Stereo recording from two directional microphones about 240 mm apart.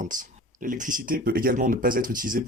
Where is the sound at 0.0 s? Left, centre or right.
Right.